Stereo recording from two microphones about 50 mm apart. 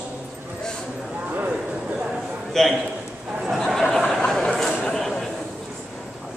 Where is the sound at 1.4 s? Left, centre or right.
Centre.